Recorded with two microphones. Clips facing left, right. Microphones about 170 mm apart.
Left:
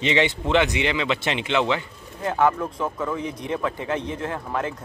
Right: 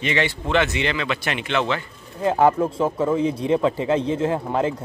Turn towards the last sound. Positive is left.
turn(degrees=-25)  # may be behind; listen again after turning